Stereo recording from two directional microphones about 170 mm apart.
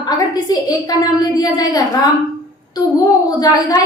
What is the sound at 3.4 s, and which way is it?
Speech, 20° left (ahead or behind).